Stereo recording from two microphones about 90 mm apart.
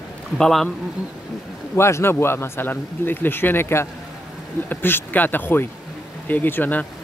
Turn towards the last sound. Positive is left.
turn(degrees=20)  # may be behind; listen again after turning